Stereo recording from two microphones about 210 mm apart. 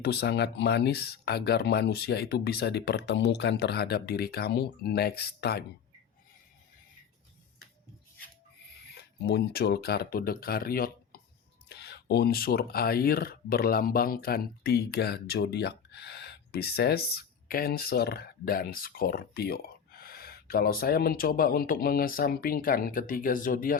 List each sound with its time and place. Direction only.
0.0 s speech: 50° left (ahead or behind)
9.0 s speech: 50° left (ahead or behind)